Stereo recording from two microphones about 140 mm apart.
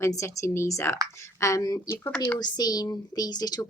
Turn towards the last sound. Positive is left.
turn(degrees=30)  # may be behind; listen again after turning